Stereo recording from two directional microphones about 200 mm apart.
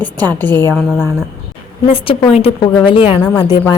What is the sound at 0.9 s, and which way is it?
Speech, 5° right (ahead or behind).